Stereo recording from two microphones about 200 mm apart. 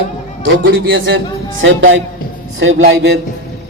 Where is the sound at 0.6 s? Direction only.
75° right (ahead or behind).